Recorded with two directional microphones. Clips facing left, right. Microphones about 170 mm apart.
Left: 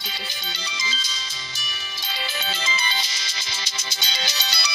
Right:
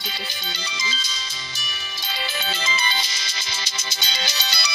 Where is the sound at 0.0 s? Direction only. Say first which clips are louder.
Right 2 dB; 55° right (ahead or behind).